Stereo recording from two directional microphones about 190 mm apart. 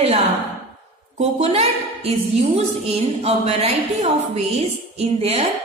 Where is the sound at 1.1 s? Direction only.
35° right (ahead or behind).